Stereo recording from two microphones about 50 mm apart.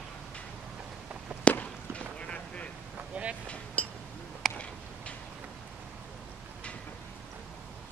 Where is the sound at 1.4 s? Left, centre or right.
Left.